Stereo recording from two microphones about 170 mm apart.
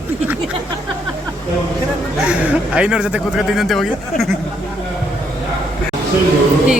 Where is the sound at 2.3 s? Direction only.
5° right (ahead or behind).